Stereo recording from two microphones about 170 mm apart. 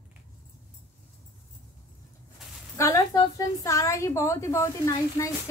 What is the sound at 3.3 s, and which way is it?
A woman's voice, 20° left (ahead or behind).